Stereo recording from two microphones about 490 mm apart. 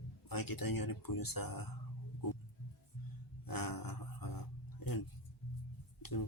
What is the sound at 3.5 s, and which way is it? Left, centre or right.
Dog, left.